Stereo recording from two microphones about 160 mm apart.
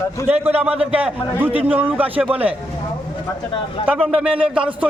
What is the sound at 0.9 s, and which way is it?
A man's voice, 10° right (ahead or behind).